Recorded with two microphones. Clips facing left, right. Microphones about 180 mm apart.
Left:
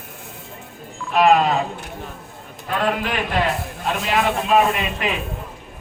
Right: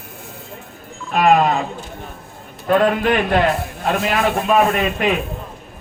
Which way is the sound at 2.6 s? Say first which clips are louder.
Right 7 dB; 45° right (ahead or behind).